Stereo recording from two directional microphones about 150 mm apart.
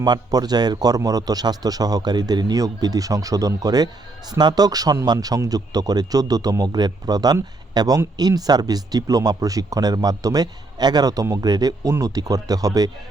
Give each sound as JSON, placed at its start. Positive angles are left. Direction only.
{"t": 0.0, "sound": "speech", "side_deg": -25}